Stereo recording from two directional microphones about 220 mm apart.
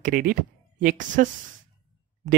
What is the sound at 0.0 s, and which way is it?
Speech, 40° right (ahead or behind).